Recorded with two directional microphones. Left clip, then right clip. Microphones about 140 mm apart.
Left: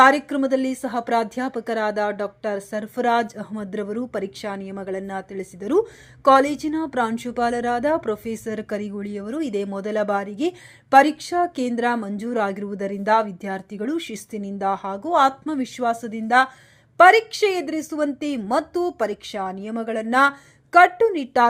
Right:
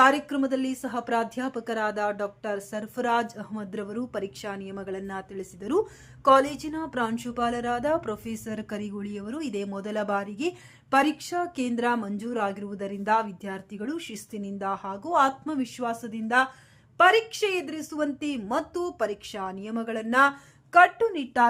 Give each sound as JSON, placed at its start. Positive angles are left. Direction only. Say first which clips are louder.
{"t": 0.0, "sound": "a woman's voice", "louder": "left 6 dB", "side_deg": 30}